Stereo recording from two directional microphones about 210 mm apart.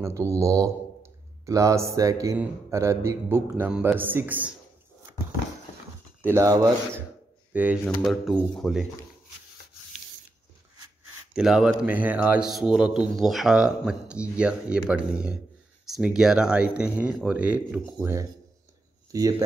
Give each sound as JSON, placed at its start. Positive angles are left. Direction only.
{"t": 0.0, "sound": "speech", "side_deg": -15}
{"t": 6.2, "sound": "speech", "side_deg": -15}
{"t": 7.8, "sound": "a man's voice", "side_deg": 5}
{"t": 11.3, "sound": "a man's voice", "side_deg": -5}
{"t": 19.1, "sound": "speech", "side_deg": -15}